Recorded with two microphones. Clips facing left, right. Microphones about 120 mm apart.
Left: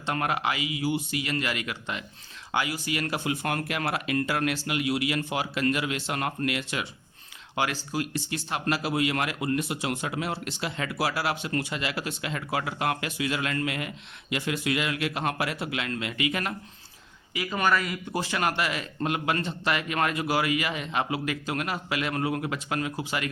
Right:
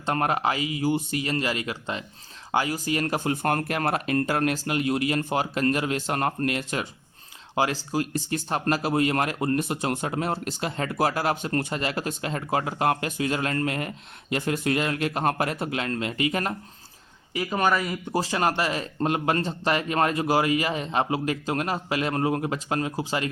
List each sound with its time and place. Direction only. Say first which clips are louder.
0.0 s speech: right 3 dB; 35° right (ahead or behind)
17.6 s speech: right 1 dB; 40° right (ahead or behind)